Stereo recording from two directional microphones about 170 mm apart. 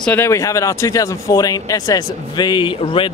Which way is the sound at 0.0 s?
10° left (ahead or behind).